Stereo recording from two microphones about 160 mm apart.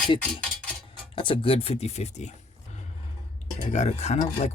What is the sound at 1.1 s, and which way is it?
Speech, 30° left (ahead or behind).